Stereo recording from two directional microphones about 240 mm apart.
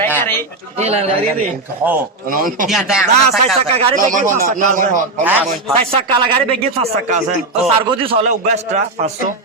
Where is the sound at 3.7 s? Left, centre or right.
Right.